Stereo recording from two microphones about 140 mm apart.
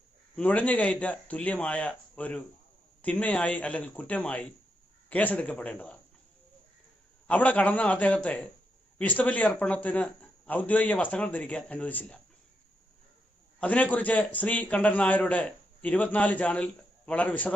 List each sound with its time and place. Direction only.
0.3 s a man's voice: 10° left (ahead or behind)
7.3 s a man's voice: 10° left (ahead or behind)
13.6 s a man's voice: 10° left (ahead or behind)